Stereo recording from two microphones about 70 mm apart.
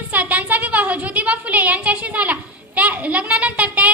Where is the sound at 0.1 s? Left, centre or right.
Right.